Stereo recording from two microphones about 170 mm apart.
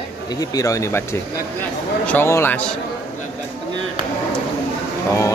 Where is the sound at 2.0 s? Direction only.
15° left (ahead or behind).